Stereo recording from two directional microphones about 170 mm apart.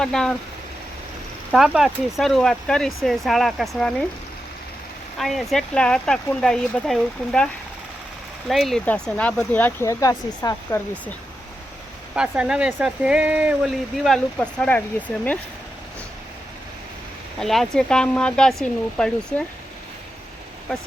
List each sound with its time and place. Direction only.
0.0 s speech: 5° left (ahead or behind)
1.5 s speech: centre (ahead or behind)
5.1 s speech: centre (ahead or behind)
8.4 s speech: centre (ahead or behind); by 10.8 s 20° left (ahead or behind)
12.1 s speech: 5° right (ahead or behind)
17.4 s speech: centre (ahead or behind)